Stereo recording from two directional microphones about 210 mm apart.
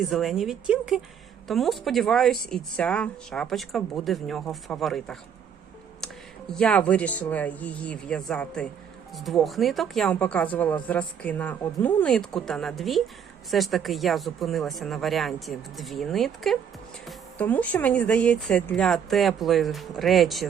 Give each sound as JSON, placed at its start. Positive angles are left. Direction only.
{"t": 0.0, "sound": "speech", "side_deg": 0}
{"t": 6.5, "sound": "speech", "side_deg": 5}